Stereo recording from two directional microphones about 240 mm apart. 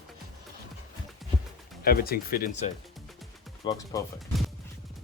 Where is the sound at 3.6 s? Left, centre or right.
Centre.